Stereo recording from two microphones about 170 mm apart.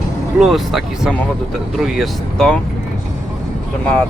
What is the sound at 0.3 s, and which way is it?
Speech, centre (ahead or behind).